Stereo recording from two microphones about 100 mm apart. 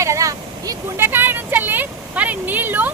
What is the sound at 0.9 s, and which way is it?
Speech, 20° right (ahead or behind).